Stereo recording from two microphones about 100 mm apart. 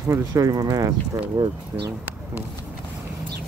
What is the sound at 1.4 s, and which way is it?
Speech, 60° right (ahead or behind).